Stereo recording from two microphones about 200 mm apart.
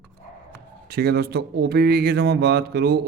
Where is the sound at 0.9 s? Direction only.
50° right (ahead or behind).